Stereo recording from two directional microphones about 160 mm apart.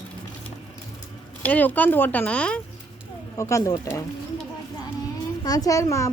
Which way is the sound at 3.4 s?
20° left (ahead or behind).